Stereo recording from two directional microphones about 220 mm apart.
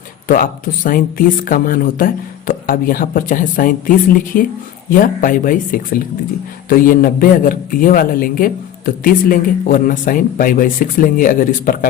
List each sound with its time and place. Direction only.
0.3 s a man's voice: 40° left (ahead or behind)